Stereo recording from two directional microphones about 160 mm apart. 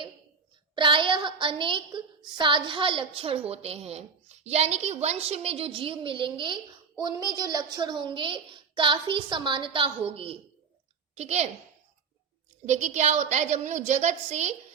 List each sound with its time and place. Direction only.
0.8 s a woman's voice: 30° right (ahead or behind)
12.6 s a woman's voice: 50° right (ahead or behind)